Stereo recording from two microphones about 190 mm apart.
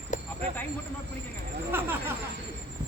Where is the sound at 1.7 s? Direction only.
10° right (ahead or behind).